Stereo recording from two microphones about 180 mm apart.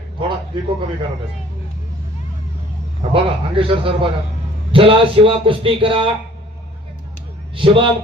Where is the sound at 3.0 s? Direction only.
30° right (ahead or behind).